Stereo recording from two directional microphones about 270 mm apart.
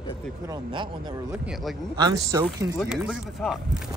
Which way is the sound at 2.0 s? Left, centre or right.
Centre.